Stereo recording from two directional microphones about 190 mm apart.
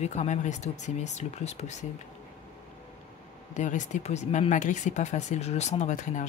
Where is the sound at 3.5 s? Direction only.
40° left (ahead or behind).